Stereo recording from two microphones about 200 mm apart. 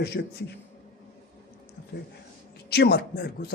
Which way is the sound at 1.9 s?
55° left (ahead or behind).